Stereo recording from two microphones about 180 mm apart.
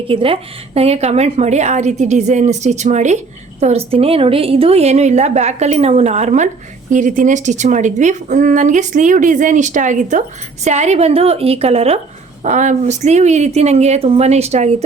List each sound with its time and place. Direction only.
0.1 s a woman's voice: 30° right (ahead or behind)